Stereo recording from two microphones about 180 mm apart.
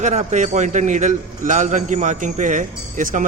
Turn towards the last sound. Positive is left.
turn(degrees=-45)  # may be behind; listen again after turning